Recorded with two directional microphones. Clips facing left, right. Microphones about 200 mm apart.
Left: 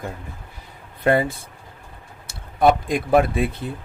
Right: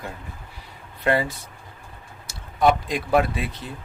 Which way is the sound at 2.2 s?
55° left (ahead or behind).